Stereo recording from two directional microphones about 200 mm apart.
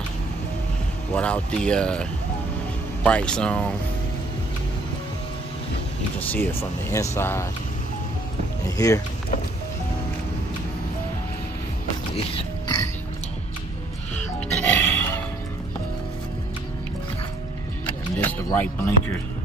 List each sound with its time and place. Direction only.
1.1 s speech: 5° left (ahead or behind)
6.1 s speech: 10° left (ahead or behind)
8.6 s speech: 20° left (ahead or behind)
14.1 s music: 10° left (ahead or behind)
17.8 s music: 10° left (ahead or behind)